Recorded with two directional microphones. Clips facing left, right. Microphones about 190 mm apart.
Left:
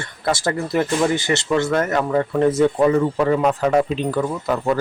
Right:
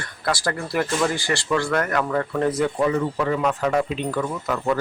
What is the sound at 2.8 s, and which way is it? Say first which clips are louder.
Speech: left 5 dB; 35° left (ahead or behind).